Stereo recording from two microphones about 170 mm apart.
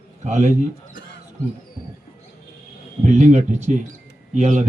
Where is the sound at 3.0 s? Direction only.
45° right (ahead or behind).